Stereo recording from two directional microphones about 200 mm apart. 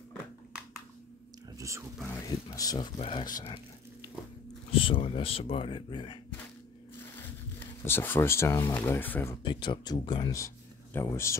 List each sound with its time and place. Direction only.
1.6 s speech: 15° right (ahead or behind)
2.0 s speech: 15° left (ahead or behind)
4.7 s speech: 25° left (ahead or behind)
7.8 s speech: 10° left (ahead or behind)
9.4 s speech: 25° left (ahead or behind)